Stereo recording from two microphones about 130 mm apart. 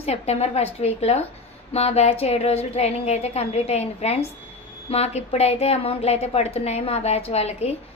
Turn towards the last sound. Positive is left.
turn(degrees=55)  # may be behind; listen again after turning